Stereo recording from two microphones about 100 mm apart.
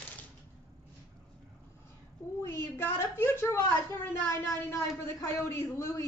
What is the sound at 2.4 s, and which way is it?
A woman's voice, 25° left (ahead or behind).